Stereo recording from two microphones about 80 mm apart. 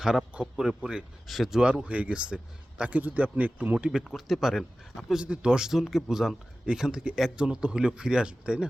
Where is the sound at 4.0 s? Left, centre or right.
Centre.